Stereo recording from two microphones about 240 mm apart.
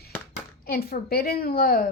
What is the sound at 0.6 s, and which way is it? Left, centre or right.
A woman's voice, left.